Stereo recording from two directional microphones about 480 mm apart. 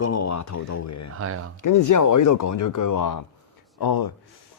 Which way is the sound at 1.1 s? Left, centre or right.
Right.